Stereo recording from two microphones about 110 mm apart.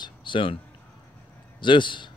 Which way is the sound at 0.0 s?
50° left (ahead or behind).